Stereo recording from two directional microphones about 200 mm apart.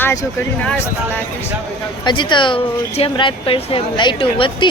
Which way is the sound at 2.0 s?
25° left (ahead or behind).